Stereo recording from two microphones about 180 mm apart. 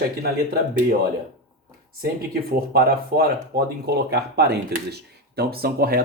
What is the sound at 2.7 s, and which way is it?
Speech, 55° right (ahead or behind).